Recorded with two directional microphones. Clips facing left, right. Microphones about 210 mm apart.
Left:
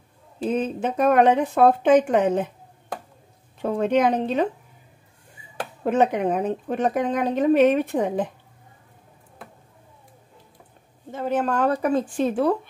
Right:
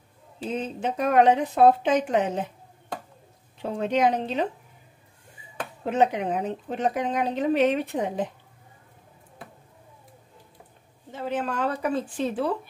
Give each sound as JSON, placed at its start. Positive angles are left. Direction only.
{"t": 0.4, "sound": "speech", "side_deg": 55}
{"t": 3.6, "sound": "speech", "side_deg": 50}
{"t": 5.9, "sound": "speech", "side_deg": 50}
{"t": 11.1, "sound": "speech", "side_deg": 45}